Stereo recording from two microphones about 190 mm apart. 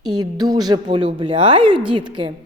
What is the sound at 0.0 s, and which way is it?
A woman's voice, 20° right (ahead or behind).